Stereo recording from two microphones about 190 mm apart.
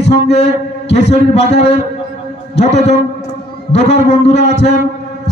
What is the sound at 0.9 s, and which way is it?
A man's voice, 35° left (ahead or behind).